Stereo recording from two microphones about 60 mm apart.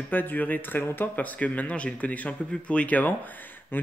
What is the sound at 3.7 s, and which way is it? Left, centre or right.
Speech, left.